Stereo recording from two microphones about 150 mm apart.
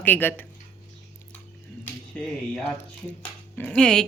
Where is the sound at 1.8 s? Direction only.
5° left (ahead or behind).